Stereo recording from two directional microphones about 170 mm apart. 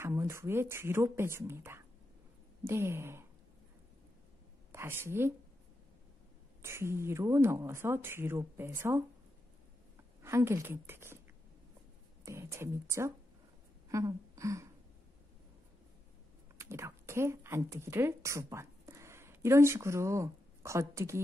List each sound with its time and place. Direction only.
0.0 s a woman's voice: 15° right (ahead or behind)
4.7 s a woman's voice: 15° right (ahead or behind)
6.6 s a woman's voice: 15° right (ahead or behind)
10.2 s a woman's voice: 15° right (ahead or behind)
12.3 s a woman's voice: 15° right (ahead or behind)
13.8 s a sound: 20° right (ahead or behind)
16.5 s speech: 15° right (ahead or behind)